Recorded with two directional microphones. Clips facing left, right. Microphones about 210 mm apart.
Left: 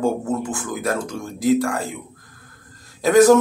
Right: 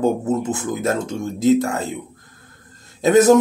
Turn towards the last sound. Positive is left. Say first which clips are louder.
# even
turn(degrees=-20)  # may be behind; listen again after turning